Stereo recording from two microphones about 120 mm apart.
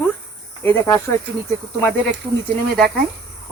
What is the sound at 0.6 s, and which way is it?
Cricket, 20° left (ahead or behind).